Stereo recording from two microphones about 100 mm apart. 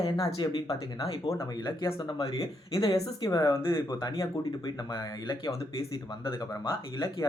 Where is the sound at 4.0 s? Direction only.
40° left (ahead or behind).